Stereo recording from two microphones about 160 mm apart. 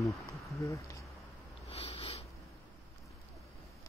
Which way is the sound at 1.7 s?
40° left (ahead or behind).